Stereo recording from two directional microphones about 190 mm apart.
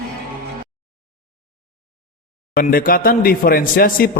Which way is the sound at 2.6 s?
50° left (ahead or behind).